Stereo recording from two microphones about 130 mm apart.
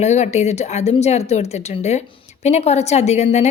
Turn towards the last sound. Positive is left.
turn(degrees=60)  # may be behind; listen again after turning